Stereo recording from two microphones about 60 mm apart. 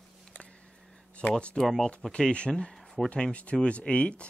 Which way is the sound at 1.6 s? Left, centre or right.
Centre.